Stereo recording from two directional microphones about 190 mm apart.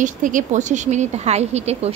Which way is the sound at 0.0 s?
40° right (ahead or behind).